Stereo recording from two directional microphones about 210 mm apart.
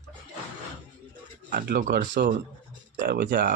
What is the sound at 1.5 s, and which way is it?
Speech, 45° right (ahead or behind).